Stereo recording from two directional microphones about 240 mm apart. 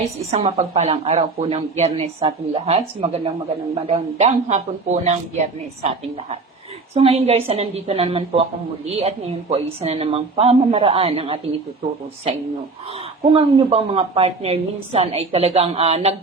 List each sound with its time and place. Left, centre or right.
0.3 s speech: right
6.9 s speech: right
13.3 s speech: right